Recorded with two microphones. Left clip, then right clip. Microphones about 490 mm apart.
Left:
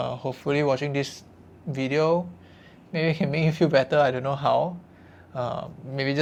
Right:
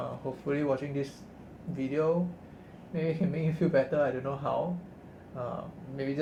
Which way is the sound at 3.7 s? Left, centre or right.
Left.